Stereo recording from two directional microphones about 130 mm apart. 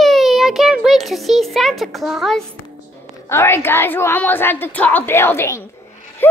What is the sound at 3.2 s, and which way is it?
A woman's voice, 20° left (ahead or behind).